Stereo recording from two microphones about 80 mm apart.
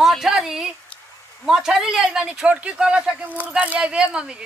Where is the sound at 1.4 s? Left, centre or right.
Centre.